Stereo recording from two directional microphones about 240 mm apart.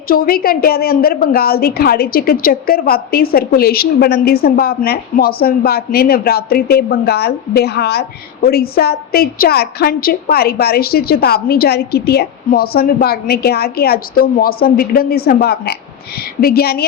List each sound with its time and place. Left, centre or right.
0.1 s a woman's voice: left